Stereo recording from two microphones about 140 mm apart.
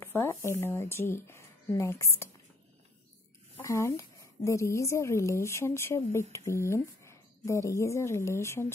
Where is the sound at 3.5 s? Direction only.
20° left (ahead or behind).